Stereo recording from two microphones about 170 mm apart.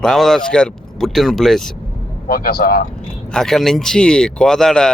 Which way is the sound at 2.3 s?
60° left (ahead or behind).